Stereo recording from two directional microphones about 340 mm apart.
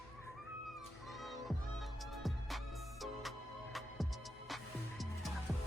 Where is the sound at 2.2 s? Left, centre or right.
Centre.